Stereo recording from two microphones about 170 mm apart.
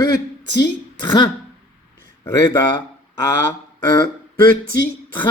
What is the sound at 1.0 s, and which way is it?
Speech, 25° left (ahead or behind).